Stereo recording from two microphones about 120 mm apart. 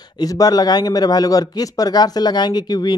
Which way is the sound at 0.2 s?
30° left (ahead or behind).